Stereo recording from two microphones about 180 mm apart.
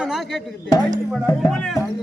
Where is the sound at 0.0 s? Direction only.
Centre (ahead or behind).